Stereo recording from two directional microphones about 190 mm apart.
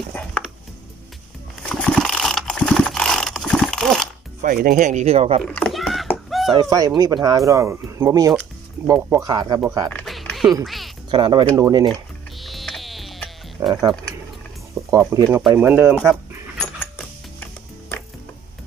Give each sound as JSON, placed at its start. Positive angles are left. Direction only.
{"t": 1.7, "sound": "mechanisms", "side_deg": 5}
{"t": 4.4, "sound": "speech", "side_deg": -45}
{"t": 5.4, "sound": "a sound", "side_deg": 5}
{"t": 6.5, "sound": "speech", "side_deg": -20}
{"t": 9.8, "sound": "a sound", "side_deg": 0}
{"t": 10.6, "sound": "speech", "side_deg": 0}
{"t": 11.1, "sound": "speech", "side_deg": -25}
{"t": 11.9, "sound": "music", "side_deg": 0}
{"t": 13.6, "sound": "speech", "side_deg": -15}
{"t": 14.9, "sound": "speech", "side_deg": -15}
{"t": 16.8, "sound": "music", "side_deg": 10}